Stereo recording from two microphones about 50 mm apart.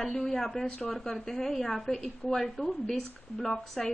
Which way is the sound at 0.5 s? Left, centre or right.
Centre.